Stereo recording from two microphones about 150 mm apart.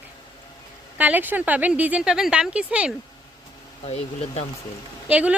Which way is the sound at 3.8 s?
45° left (ahead or behind).